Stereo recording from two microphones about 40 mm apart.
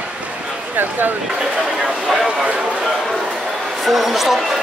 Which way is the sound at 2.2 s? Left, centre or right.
Right.